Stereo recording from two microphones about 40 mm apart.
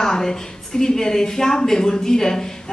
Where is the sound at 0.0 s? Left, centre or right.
Centre.